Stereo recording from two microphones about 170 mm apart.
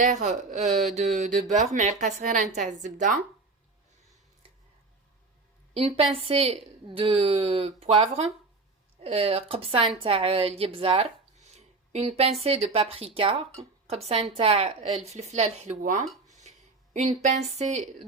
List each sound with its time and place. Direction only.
0.0 s a woman's voice: 45° right (ahead or behind)
5.7 s a woman's voice: 35° right (ahead or behind)
16.4 s a sound: 45° right (ahead or behind)
17.2 s a woman's voice: 40° right (ahead or behind)